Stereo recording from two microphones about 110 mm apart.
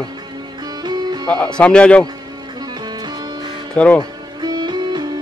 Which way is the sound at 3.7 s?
10° left (ahead or behind).